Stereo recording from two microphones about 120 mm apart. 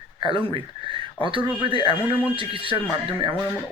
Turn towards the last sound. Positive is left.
turn(degrees=-45)  # may be behind; listen again after turning